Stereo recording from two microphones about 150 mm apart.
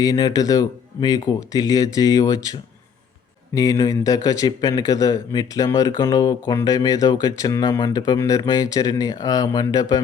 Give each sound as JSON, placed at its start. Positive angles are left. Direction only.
{"t": 0.0, "sound": "a man's voice", "side_deg": 25}